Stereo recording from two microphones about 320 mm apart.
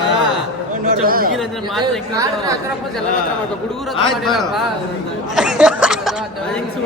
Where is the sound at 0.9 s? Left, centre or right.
Right.